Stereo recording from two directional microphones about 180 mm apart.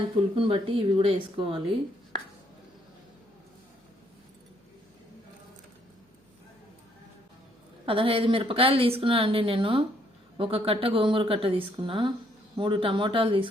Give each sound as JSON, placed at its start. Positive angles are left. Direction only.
{"t": 0.3, "sound": "speech", "side_deg": -30}
{"t": 7.9, "sound": "speech", "side_deg": -30}